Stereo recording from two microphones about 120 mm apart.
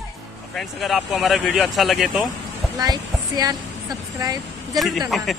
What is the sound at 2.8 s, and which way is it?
Speech, 35° right (ahead or behind).